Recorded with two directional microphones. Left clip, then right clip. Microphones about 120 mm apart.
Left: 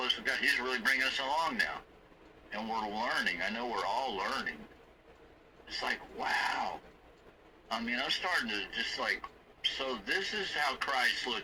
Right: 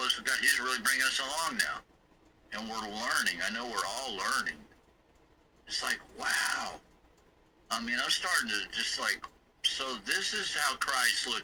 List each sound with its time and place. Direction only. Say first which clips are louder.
0.0 s a man's voice: right 2 dB; 25° right (ahead or behind)
5.6 s a man's voice: right 2 dB; 25° right (ahead or behind)